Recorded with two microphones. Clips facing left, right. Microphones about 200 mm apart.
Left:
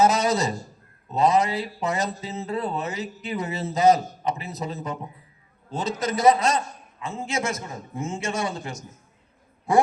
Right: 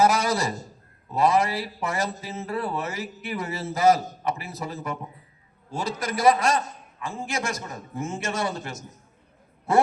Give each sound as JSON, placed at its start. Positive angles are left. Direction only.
{"t": 0.0, "sound": "speech", "side_deg": 20}